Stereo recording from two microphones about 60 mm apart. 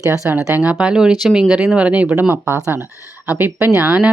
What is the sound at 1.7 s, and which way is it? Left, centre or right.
Speech, right.